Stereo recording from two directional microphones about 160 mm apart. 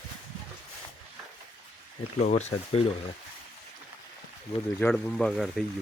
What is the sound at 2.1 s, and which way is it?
Speech, 45° left (ahead or behind).